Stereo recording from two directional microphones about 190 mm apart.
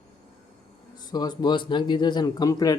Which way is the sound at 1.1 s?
20° left (ahead or behind).